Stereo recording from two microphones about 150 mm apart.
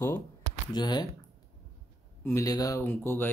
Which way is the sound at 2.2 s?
20° left (ahead or behind).